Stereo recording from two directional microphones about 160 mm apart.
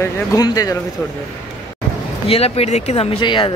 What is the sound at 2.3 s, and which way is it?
Speech, 40° left (ahead or behind).